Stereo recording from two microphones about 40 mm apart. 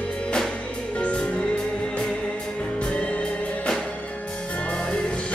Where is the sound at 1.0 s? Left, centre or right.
Left.